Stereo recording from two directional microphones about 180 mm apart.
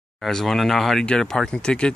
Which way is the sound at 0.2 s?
Centre (ahead or behind).